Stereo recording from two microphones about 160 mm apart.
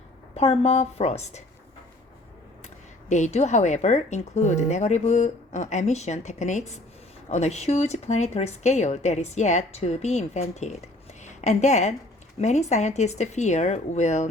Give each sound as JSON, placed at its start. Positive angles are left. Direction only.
{"t": 0.3, "sound": "a woman's voice", "side_deg": 40}
{"t": 3.1, "sound": "speech", "side_deg": 50}